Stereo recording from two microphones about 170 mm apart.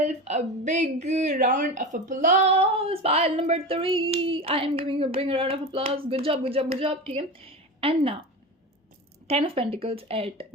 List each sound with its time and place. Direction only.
0.0 s a woman's voice: 40° right (ahead or behind)
9.2 s speech: 35° right (ahead or behind)